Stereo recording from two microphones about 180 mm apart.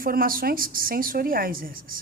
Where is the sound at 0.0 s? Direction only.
55° right (ahead or behind).